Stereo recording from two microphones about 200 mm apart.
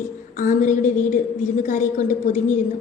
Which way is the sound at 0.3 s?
40° left (ahead or behind).